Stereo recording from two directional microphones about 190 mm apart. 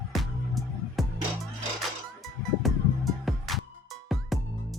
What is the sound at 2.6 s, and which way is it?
Music, centre (ahead or behind).